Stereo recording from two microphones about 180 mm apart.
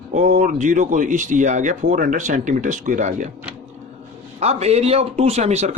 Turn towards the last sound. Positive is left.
turn(degrees=-35)  # may be behind; listen again after turning